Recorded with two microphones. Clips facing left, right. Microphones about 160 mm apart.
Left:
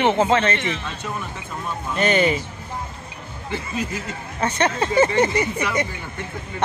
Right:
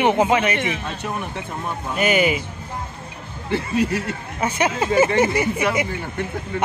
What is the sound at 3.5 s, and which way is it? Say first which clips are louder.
Speech: right 7 dB; 65° right (ahead or behind).